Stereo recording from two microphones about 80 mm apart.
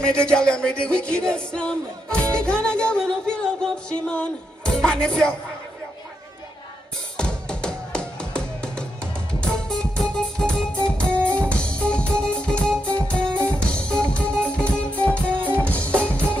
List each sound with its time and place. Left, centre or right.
0.0 s music: centre
7.2 s music: centre